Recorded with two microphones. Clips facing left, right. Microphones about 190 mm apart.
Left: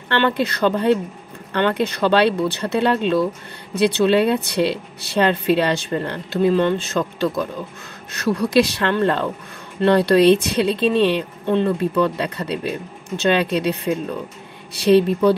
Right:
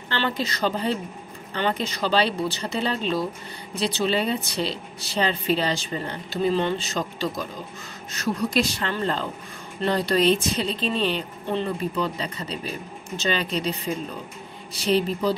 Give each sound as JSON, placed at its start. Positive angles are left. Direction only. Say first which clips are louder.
{"t": 0.1, "sound": "a woman's voice", "louder": "left 7 dB", "side_deg": 60}